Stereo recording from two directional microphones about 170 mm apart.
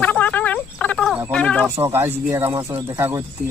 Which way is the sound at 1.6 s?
15° right (ahead or behind).